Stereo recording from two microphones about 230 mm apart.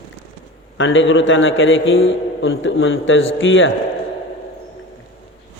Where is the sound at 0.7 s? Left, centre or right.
Left.